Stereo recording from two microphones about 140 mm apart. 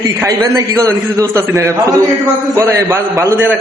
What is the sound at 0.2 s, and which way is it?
A man's voice, 20° right (ahead or behind).